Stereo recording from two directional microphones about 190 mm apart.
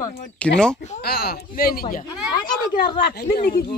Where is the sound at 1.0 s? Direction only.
55° left (ahead or behind).